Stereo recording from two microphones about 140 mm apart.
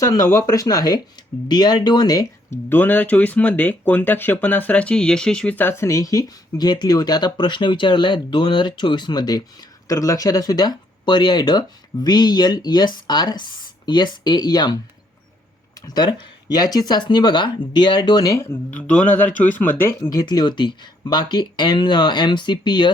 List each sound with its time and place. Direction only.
0.0 s speech: 20° left (ahead or behind)
15.9 s speech: 30° left (ahead or behind); by 19.7 s 10° left (ahead or behind)
20.1 s speech: 30° left (ahead or behind)